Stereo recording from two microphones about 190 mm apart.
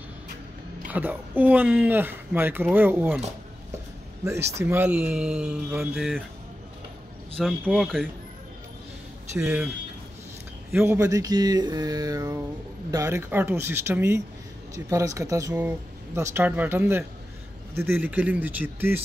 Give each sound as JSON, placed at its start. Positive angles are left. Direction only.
{"t": 0.8, "sound": "speech", "side_deg": -10}
{"t": 7.3, "sound": "speech", "side_deg": 0}
{"t": 9.4, "sound": "speech", "side_deg": -10}
{"t": 10.7, "sound": "speech", "side_deg": -15}